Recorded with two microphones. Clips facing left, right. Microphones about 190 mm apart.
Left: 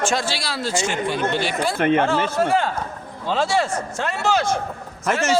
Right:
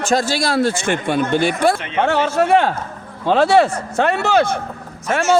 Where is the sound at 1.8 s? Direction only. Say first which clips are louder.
Left 4 dB; 50° left (ahead or behind).